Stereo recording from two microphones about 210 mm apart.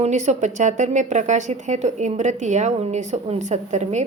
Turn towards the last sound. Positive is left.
turn(degrees=-35)  # may be behind; listen again after turning